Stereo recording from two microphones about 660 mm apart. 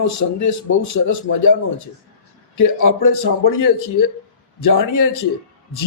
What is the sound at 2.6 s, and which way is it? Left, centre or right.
A man's voice, left.